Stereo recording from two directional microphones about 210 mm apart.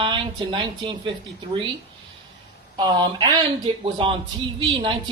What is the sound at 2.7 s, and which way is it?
Speech, 20° right (ahead or behind).